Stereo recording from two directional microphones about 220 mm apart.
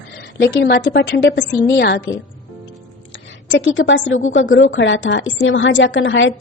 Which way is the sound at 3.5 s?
60° left (ahead or behind).